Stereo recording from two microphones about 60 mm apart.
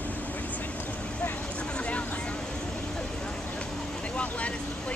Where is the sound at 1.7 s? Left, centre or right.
Centre.